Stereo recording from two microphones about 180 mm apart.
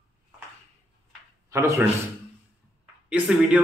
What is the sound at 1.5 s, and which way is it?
Speech, 15° right (ahead or behind).